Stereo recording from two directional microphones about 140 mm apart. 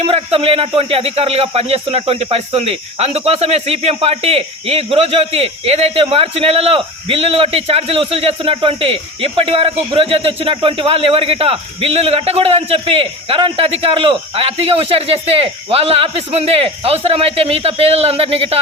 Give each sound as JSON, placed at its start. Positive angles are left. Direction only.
{"t": 0.0, "sound": "speech", "side_deg": -45}